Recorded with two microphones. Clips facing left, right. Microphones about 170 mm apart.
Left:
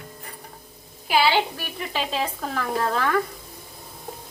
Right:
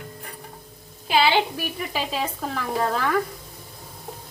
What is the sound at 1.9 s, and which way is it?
Speech, 5° right (ahead or behind).